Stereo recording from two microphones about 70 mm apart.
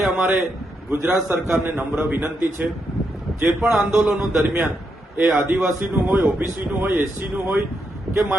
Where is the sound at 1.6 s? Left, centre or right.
Right.